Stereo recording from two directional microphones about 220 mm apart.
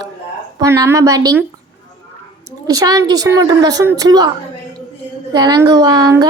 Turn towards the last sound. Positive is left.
turn(degrees=-20)  # may be behind; listen again after turning